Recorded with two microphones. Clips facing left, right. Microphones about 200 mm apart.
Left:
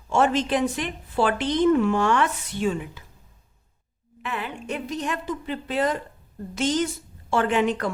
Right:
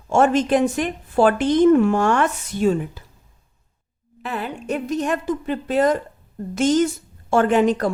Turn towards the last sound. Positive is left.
turn(degrees=-40)  # may be behind; listen again after turning